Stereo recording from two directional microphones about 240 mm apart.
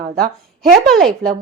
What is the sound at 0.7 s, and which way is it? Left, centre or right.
Speech, centre.